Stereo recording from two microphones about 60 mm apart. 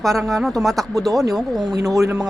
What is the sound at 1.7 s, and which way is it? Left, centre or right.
Speech, right.